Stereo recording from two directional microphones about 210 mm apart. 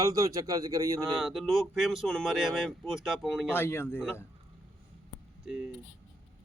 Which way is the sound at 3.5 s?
10° left (ahead or behind).